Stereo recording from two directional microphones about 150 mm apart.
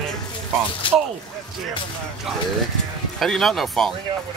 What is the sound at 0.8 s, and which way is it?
Speech, 35° left (ahead or behind).